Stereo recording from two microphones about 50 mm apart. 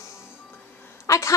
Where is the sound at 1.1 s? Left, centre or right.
Left.